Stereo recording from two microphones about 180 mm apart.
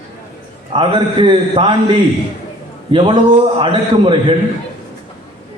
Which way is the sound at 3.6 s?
30° right (ahead or behind).